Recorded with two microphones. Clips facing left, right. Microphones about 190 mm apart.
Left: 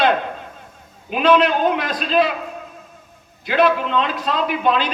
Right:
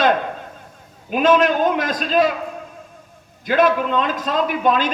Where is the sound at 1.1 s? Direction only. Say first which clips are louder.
Even; 45° right (ahead or behind).